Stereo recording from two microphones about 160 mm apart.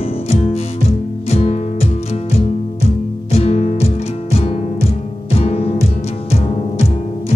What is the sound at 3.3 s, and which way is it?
Music, 40° left (ahead or behind).